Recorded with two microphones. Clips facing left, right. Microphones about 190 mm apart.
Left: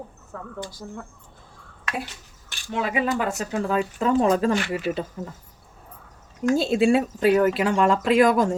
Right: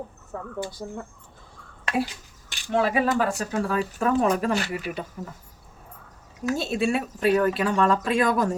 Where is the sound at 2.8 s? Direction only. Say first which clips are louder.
Left 2 dB; 20° left (ahead or behind).